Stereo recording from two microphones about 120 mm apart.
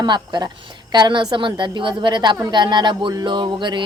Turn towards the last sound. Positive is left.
turn(degrees=-40)  # may be behind; listen again after turning